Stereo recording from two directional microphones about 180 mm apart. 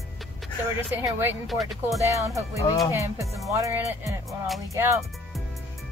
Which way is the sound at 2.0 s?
15° right (ahead or behind).